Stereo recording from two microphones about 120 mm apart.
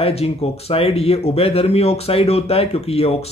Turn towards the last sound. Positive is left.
turn(degrees=55)  # may be behind; listen again after turning